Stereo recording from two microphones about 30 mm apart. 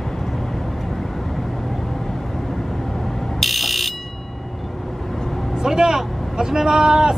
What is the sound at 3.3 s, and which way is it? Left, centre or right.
Fire alarm, centre.